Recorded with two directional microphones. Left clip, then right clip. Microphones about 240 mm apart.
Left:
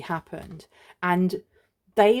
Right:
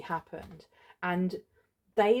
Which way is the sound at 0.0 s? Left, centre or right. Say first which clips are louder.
Left 4 dB; left.